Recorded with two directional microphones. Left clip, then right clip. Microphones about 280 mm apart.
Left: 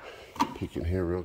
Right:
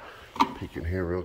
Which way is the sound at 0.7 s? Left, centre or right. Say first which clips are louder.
Even; left.